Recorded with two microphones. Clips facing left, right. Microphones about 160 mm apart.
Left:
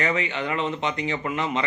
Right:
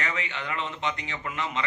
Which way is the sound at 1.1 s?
30° left (ahead or behind).